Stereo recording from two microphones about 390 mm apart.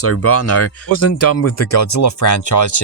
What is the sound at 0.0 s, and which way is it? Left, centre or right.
Speech, left.